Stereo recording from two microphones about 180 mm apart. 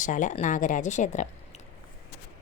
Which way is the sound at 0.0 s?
45° left (ahead or behind).